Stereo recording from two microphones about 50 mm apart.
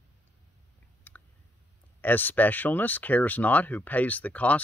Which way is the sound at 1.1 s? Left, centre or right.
Left.